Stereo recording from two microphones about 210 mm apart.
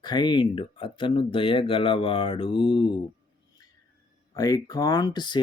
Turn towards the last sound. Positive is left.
turn(degrees=20)  # may be behind; listen again after turning